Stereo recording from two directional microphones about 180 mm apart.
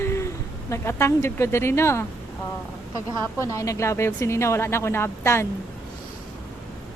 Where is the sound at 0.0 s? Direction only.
15° left (ahead or behind).